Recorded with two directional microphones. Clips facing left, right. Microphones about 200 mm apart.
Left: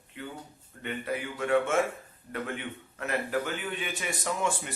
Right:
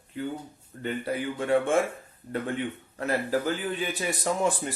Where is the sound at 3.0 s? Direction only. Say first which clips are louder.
Right 4 dB; 35° right (ahead or behind).